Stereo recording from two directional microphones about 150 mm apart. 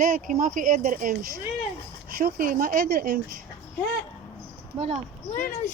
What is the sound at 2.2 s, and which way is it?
Speech, 70° right (ahead or behind).